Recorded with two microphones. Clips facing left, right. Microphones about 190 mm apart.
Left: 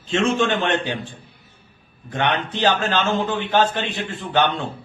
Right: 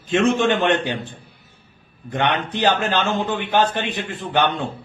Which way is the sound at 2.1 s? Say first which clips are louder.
Right 1 dB; 15° right (ahead or behind).